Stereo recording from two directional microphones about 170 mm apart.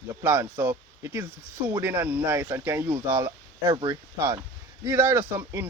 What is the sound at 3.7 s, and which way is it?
Speech, 25° right (ahead or behind).